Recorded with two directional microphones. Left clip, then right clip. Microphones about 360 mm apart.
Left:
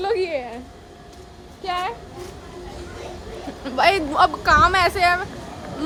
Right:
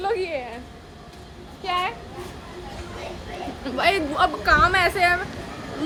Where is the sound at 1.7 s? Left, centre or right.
Centre.